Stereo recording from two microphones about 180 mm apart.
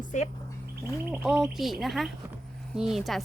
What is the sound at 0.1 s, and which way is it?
Speech, 45° left (ahead or behind).